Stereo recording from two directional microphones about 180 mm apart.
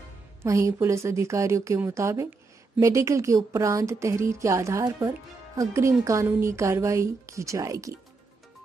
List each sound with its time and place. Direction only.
0.4 s speech: 15° right (ahead or behind)